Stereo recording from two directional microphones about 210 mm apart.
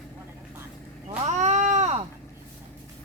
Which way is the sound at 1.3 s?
35° right (ahead or behind).